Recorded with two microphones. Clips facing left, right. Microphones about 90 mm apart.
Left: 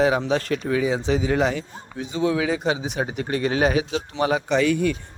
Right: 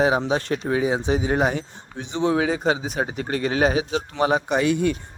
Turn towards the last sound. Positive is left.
turn(degrees=-25)  # may be behind; listen again after turning